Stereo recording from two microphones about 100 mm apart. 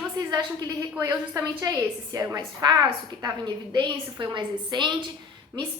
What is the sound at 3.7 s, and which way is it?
A woman's voice, 50° right (ahead or behind).